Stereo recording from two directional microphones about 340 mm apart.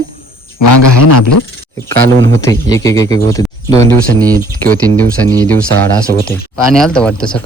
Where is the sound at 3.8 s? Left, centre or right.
Centre.